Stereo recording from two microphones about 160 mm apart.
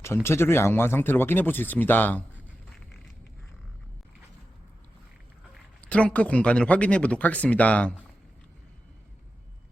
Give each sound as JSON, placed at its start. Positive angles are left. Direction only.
{"t": 0.0, "sound": "speech", "side_deg": 15}
{"t": 5.8, "sound": "speech", "side_deg": 10}